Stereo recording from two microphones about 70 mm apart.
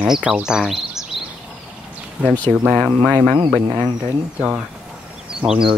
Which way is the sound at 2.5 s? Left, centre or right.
Right.